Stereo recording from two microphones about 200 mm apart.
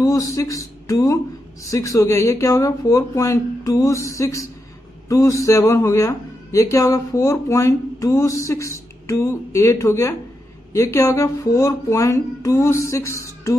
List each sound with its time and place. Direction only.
0.0 s a man's voice: 15° left (ahead or behind)